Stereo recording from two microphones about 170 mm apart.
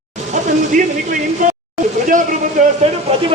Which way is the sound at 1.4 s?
50° right (ahead or behind).